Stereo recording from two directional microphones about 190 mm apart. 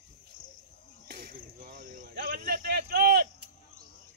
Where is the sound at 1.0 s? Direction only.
55° right (ahead or behind).